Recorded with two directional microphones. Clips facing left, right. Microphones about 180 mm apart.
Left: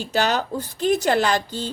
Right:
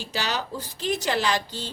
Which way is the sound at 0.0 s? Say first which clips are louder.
Left 8 dB; 50° left (ahead or behind).